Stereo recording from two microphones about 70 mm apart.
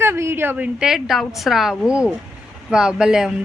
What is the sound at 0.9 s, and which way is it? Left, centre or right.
A woman's voice, centre.